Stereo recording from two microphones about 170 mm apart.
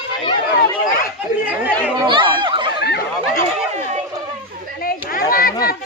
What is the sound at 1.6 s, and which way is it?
Chatter, 10° right (ahead or behind).